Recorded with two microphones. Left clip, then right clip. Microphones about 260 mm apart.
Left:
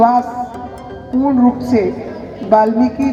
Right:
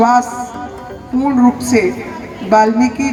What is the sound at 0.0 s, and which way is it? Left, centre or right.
Speech, right.